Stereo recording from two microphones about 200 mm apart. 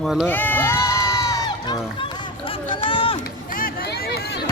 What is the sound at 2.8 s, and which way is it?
Run, 25° left (ahead or behind).